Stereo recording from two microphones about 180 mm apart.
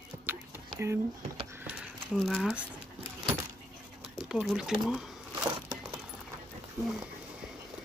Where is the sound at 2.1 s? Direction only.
Centre (ahead or behind).